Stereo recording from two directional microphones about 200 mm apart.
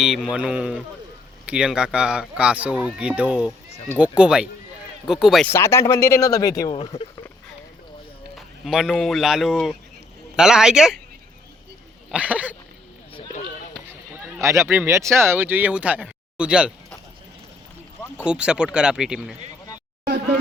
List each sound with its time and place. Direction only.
0.0 s speech: centre (ahead or behind)
5.5 s speech: 15° left (ahead or behind)
8.4 s speech: centre (ahead or behind)
12.1 s speech: 5° right (ahead or behind)
14.4 s speech: 15° right (ahead or behind)
18.3 s speech: 5° right (ahead or behind)